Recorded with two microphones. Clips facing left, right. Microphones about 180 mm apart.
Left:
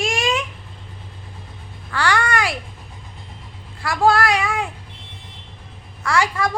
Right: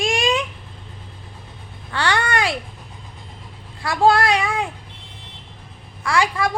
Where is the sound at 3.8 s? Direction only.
20° right (ahead or behind).